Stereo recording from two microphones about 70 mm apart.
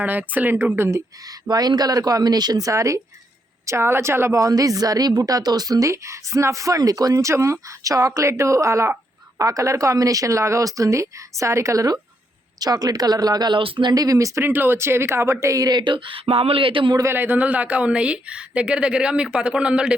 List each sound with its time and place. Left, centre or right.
0.0 s speech: right
0.8 s speech: right
1.3 s speech: right
3.7 s speech: right
4.4 s speech: right
5.9 s speech: right
12.5 s speech: right
14.4 s speech: right
17.1 s speech: right; by 20.0 s centre